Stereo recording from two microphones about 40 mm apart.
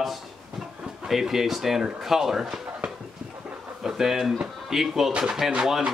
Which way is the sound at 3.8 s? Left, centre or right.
Centre.